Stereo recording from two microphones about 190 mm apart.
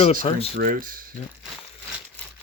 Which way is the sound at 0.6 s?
45° right (ahead or behind).